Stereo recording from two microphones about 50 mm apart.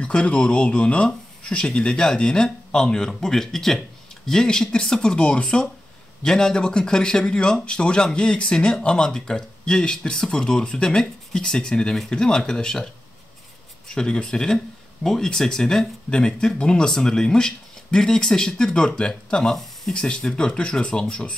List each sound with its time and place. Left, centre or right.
0.0 s speech: left
13.9 s speech: centre